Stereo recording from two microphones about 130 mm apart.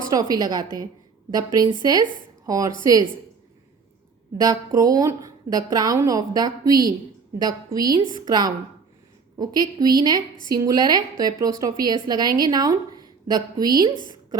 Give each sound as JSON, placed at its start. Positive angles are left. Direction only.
{"t": 0.1, "sound": "a woman's voice", "side_deg": -30}
{"t": 4.4, "sound": "a woman's voice", "side_deg": -30}